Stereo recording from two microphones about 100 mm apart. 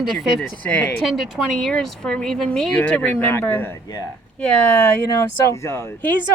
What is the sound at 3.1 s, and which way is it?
Speech, 25° left (ahead or behind).